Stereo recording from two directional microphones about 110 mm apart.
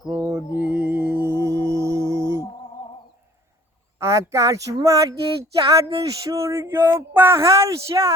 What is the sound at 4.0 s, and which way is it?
Bird, 25° right (ahead or behind).